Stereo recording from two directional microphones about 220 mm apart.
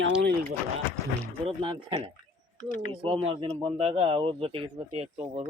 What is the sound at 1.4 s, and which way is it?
Speech, 20° right (ahead or behind).